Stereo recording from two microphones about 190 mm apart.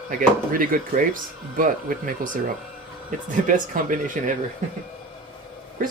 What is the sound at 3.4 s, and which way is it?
Speech, 45° right (ahead or behind).